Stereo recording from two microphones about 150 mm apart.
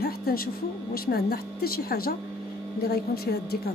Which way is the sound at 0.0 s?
85° left.